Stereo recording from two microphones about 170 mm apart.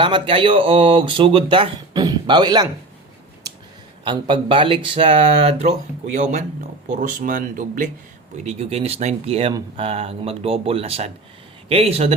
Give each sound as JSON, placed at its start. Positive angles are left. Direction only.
{"t": 0.0, "sound": "speech", "side_deg": -30}
{"t": 3.4, "sound": "a sound", "side_deg": -20}
{"t": 4.0, "sound": "speech", "side_deg": -30}
{"t": 6.8, "sound": "speech", "side_deg": -45}
{"t": 8.4, "sound": "speech", "side_deg": -40}